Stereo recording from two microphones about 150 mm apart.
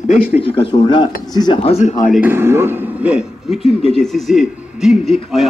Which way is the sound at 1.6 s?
45° left (ahead or behind).